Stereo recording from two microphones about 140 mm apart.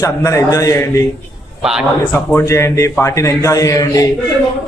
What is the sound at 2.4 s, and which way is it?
A man's voice, 20° left (ahead or behind).